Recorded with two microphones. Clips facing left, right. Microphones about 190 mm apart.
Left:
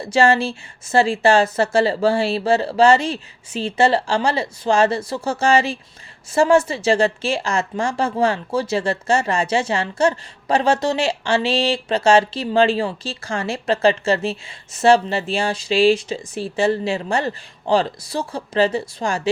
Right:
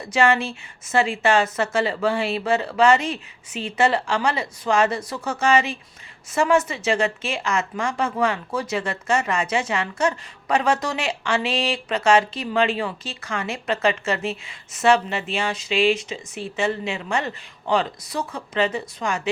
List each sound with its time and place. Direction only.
0.0 s a woman's voice: 30° left (ahead or behind)